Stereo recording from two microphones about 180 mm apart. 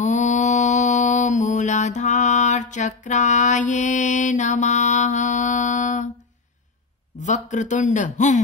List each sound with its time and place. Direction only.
0.0 s mantra: 45° left (ahead or behind)
7.2 s speech: 40° left (ahead or behind)